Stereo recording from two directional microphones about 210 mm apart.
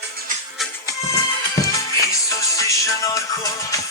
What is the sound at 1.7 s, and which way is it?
Music, 15° left (ahead or behind).